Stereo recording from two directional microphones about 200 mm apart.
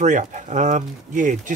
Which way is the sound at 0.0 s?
40° right (ahead or behind).